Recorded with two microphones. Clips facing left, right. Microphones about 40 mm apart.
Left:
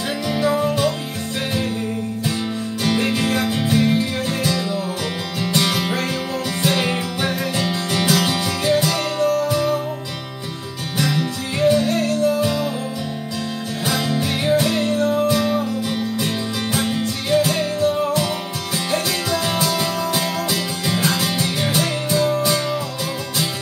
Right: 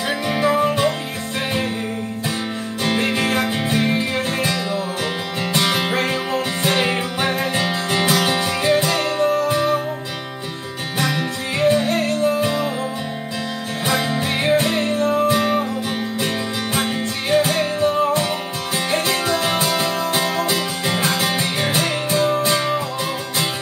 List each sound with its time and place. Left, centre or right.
0.3 s music: right
2.8 s music: right
11.0 s music: right
13.8 s music: right
16.7 s music: right